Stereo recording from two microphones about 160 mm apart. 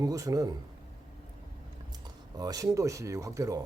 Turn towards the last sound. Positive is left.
turn(degrees=-20)  # may be behind; listen again after turning